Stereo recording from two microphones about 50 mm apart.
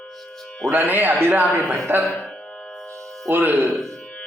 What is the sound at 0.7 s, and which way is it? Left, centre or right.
A man's voice, right.